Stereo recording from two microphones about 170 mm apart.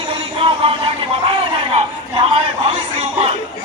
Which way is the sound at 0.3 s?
35° right (ahead or behind).